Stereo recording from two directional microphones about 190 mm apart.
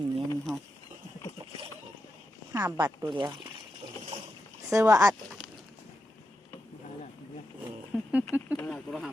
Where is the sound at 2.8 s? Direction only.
25° right (ahead or behind).